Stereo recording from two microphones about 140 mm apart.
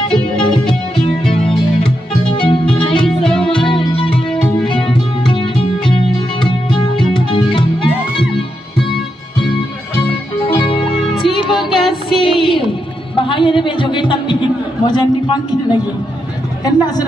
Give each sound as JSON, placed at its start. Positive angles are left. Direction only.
{"t": 0.4, "sound": "music", "side_deg": 5}
{"t": 2.4, "sound": "music", "side_deg": 40}
{"t": 3.1, "sound": "music", "side_deg": 5}
{"t": 3.6, "sound": "music", "side_deg": 40}
{"t": 10.3, "sound": "music", "side_deg": 40}
{"t": 11.1, "sound": "music", "side_deg": 0}
{"t": 13.1, "sound": "a sound", "side_deg": 40}
{"t": 16.6, "sound": "a woman's voice", "side_deg": 30}